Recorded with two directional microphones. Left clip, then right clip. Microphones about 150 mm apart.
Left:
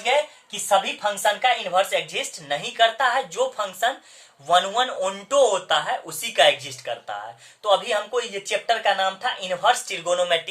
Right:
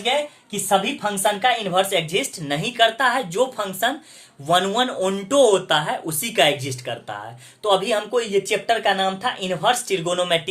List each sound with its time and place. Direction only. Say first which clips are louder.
0.7 s speech: even; 25° right (ahead or behind)